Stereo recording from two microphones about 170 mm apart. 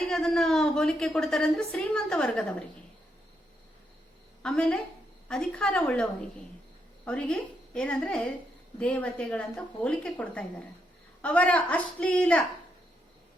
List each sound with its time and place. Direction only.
0.1 s a woman's voice: 5° left (ahead or behind)
4.4 s a woman's voice: 5° left (ahead or behind)